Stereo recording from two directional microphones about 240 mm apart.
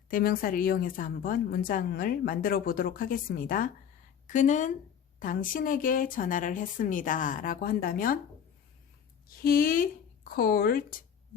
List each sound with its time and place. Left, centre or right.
0.1 s a woman's voice: left
9.2 s speech: left